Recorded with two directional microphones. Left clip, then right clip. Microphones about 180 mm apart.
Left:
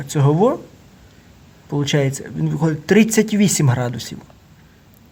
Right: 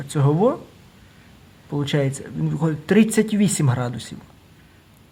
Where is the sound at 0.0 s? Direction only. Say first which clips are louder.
Left 3 dB; 25° left (ahead or behind).